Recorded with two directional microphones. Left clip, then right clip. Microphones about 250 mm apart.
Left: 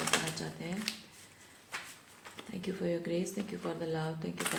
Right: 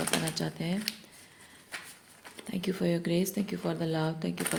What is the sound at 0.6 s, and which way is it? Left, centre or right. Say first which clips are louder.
Speech: right 6 dB; right.